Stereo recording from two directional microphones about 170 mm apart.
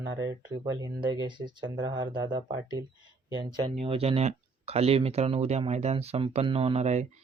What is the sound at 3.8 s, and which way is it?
Speech, 35° right (ahead or behind).